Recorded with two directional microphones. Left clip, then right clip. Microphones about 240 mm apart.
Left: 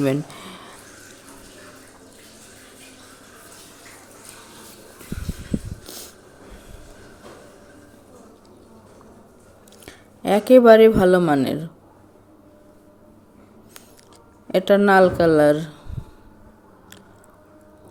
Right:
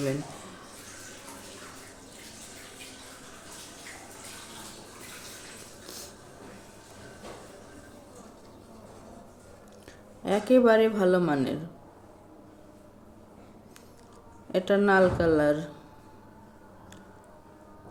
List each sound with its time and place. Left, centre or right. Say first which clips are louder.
0.0 s a sound: left 9 dB; left
5.8 s dog: left 5 dB; left
9.8 s speech: left 9 dB; left
14.5 s a woman's voice: left 8 dB; left